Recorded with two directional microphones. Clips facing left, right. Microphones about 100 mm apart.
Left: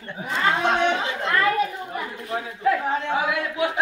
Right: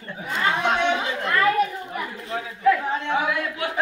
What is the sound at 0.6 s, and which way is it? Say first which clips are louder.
Chatter: right 1 dB; 30° left (ahead or behind).